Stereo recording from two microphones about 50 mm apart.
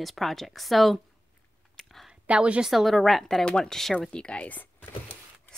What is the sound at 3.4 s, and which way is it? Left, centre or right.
A woman's voice, centre.